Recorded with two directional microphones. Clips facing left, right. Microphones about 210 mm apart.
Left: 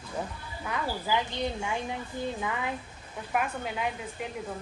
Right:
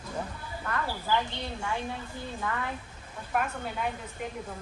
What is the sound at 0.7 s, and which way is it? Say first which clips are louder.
Speech: even; 10° left (ahead or behind).